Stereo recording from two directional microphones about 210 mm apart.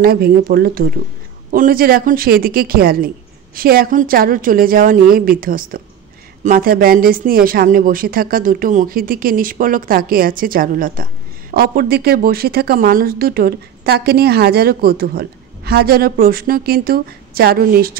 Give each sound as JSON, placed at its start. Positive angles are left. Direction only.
{"t": 0.0, "sound": "speech", "side_deg": -45}